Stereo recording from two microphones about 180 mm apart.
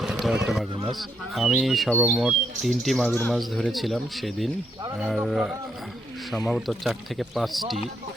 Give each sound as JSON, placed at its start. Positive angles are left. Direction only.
{"t": 0.0, "sound": "speech", "side_deg": 0}
{"t": 0.7, "sound": "a man's voice", "side_deg": -30}
{"t": 0.9, "sound": "speech", "side_deg": 0}